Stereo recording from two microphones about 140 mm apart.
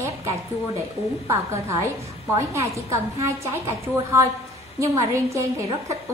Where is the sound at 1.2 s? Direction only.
20° right (ahead or behind).